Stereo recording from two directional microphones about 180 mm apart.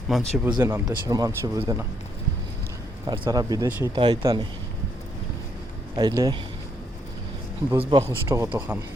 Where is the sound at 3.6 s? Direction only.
10° right (ahead or behind).